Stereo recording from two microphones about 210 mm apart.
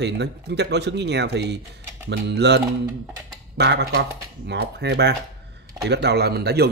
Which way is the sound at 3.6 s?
55° right (ahead or behind).